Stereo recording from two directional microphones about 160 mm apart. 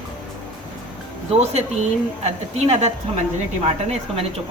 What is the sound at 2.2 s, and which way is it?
A woman's voice, 45° right (ahead or behind).